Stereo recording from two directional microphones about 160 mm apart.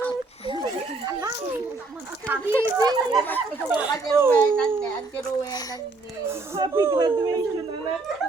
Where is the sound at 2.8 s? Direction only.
25° right (ahead or behind).